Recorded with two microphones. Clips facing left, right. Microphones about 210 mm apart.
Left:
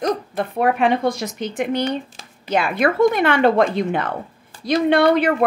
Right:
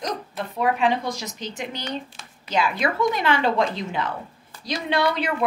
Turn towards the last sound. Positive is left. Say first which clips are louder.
# left 8 dB
turn(degrees=55)  # may be behind; listen again after turning